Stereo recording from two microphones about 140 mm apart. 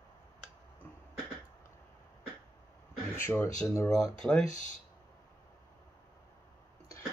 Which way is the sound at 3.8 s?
5° left (ahead or behind).